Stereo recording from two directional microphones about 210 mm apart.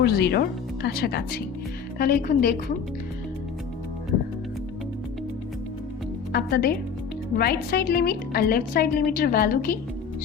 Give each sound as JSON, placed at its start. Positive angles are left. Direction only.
{"t": 0.0, "sound": "a woman's voice", "side_deg": 50}
{"t": 6.3, "sound": "a woman's voice", "side_deg": 45}